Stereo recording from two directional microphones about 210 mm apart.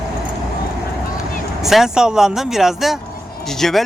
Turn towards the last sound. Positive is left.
turn(degrees=0)  # may be behind; listen again after turning